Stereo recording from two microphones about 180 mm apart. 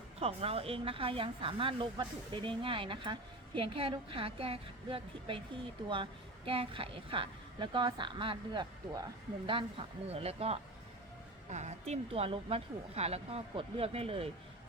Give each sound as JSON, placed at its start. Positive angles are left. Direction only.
{"t": 0.2, "sound": "a woman's voice", "side_deg": -35}